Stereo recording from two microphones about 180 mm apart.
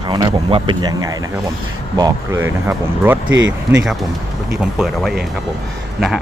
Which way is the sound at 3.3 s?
90° right.